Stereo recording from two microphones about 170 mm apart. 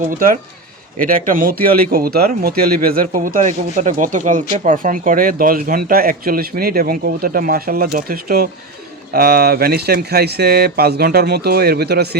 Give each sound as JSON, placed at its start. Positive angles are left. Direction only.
{"t": 0.2, "sound": "speech", "side_deg": -55}